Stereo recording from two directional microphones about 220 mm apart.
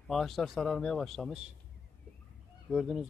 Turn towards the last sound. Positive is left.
turn(degrees=0)  # may be behind; listen again after turning